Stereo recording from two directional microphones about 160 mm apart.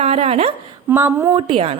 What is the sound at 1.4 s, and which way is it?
Speech, 35° right (ahead or behind).